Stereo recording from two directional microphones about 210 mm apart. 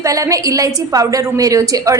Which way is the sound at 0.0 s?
15° right (ahead or behind).